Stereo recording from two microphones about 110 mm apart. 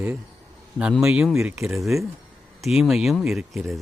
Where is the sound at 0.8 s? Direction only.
5° right (ahead or behind).